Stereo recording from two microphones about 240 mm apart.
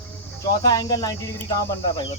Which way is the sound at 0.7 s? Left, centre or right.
Centre.